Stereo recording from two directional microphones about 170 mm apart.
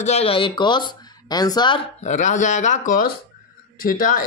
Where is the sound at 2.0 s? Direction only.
45° left (ahead or behind).